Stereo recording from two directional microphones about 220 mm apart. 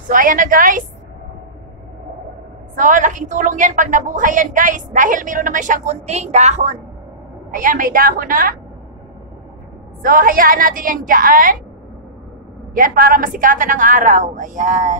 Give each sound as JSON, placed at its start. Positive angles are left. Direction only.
{"t": 0.1, "sound": "a woman's voice", "side_deg": -40}
{"t": 2.7, "sound": "a woman's voice", "side_deg": -35}
{"t": 10.0, "sound": "a woman's voice", "side_deg": -40}
{"t": 12.7, "sound": "a woman's voice", "side_deg": -40}